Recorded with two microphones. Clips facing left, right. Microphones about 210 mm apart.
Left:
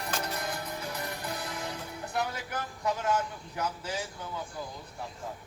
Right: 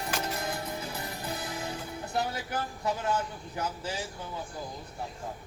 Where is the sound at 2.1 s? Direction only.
30° right (ahead or behind).